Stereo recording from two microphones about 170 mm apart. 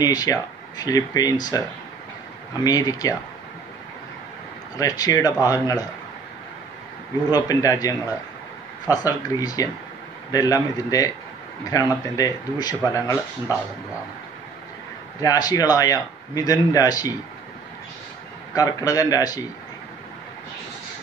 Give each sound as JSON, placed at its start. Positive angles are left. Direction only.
{"t": 0.0, "sound": "speech", "side_deg": 20}
{"t": 2.6, "sound": "speech", "side_deg": 20}
{"t": 4.7, "sound": "speech", "side_deg": 20}
{"t": 7.2, "sound": "speech", "side_deg": 20}
{"t": 15.2, "sound": "speech", "side_deg": 20}
{"t": 18.5, "sound": "speech", "side_deg": 20}